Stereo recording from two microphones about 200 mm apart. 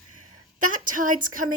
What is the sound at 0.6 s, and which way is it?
Speech, 40° right (ahead or behind).